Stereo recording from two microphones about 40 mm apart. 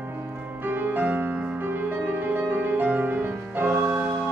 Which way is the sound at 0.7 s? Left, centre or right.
Right.